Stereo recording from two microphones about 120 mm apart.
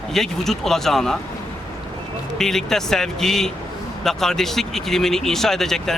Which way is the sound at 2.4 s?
5° left (ahead or behind).